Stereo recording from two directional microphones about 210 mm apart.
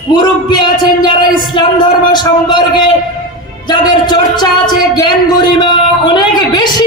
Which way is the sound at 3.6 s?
20° left (ahead or behind).